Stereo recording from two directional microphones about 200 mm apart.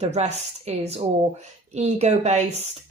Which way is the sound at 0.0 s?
35° right (ahead or behind).